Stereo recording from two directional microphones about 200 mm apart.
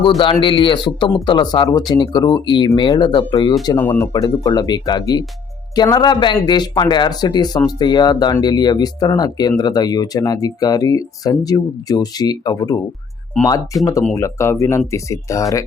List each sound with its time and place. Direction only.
0.2 s speech: 25° left (ahead or behind)
3.7 s speech: 10° left (ahead or behind)
14.2 s speech: 15° left (ahead or behind)